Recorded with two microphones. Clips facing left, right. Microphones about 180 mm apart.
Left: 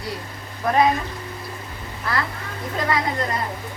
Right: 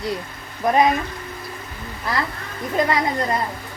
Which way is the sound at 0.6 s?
15° right (ahead or behind).